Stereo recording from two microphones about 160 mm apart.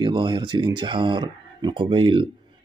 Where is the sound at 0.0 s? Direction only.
30° right (ahead or behind).